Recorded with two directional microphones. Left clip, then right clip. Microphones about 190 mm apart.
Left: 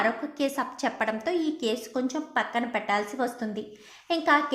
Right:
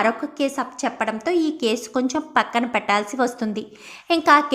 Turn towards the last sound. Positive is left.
turn(degrees=-15)  # may be behind; listen again after turning